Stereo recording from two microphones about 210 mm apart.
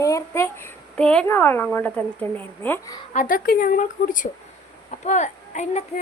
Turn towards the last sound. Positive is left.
turn(degrees=35)  # may be behind; listen again after turning